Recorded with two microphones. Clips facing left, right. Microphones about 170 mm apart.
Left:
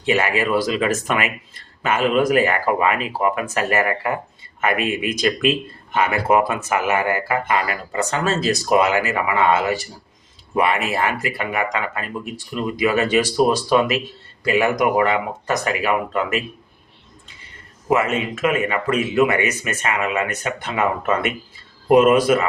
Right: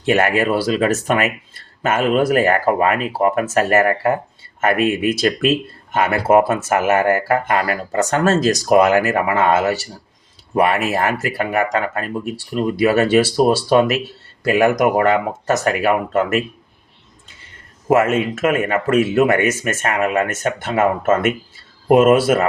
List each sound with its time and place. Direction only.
0.0 s speech: 50° right (ahead or behind)
17.8 s speech: 50° right (ahead or behind)